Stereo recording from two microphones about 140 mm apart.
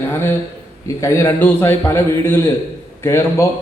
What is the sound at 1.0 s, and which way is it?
A man's voice, 20° left (ahead or behind).